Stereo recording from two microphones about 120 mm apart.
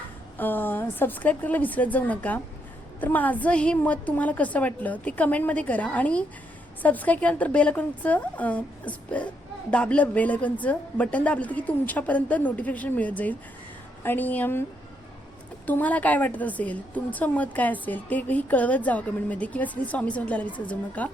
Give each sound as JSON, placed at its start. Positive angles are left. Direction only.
{"t": 0.3, "sound": "a woman's voice", "side_deg": 15}
{"t": 15.6, "sound": "a woman's voice", "side_deg": 15}